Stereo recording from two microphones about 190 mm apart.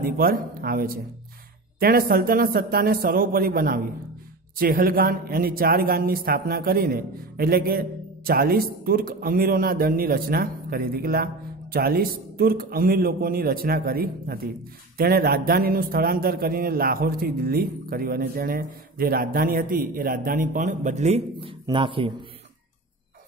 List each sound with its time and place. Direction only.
0.0 s speech: 50° right (ahead or behind); by 22.1 s 25° right (ahead or behind)